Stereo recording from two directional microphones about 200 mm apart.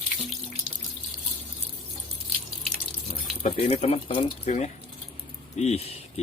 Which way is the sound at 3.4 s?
35° left (ahead or behind).